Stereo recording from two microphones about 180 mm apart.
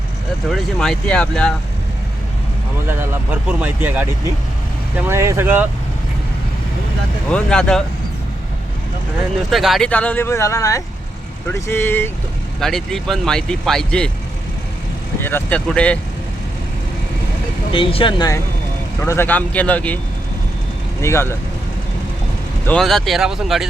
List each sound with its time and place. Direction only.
0.4 s speech: centre (ahead or behind)
2.9 s speech: 10° right (ahead or behind)
7.3 s speech: 5° left (ahead or behind)
9.5 s speech: centre (ahead or behind)
15.2 s speech: 10° left (ahead or behind)
17.7 s speech: 30° left (ahead or behind)
18.9 s speech: 15° left (ahead or behind)
21.0 s speech: 15° left (ahead or behind)
22.6 s speech: 5° left (ahead or behind)